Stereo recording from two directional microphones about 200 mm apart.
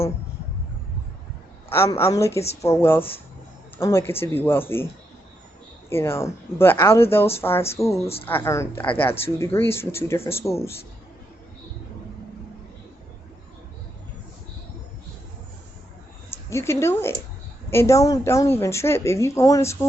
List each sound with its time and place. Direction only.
1.7 s a woman's voice: 15° left (ahead or behind)
5.9 s a woman's voice: 10° left (ahead or behind)
8.0 s speech: 30° left (ahead or behind)
8.3 s a woman's voice: 10° left (ahead or behind)
16.3 s a woman's voice: 15° left (ahead or behind)